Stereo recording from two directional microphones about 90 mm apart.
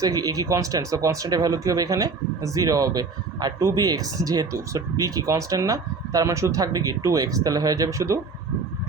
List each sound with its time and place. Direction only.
0.0 s speech: 40° right (ahead or behind)